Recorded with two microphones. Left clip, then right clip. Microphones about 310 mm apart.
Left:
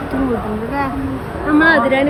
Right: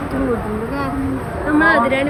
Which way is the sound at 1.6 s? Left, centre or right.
Left.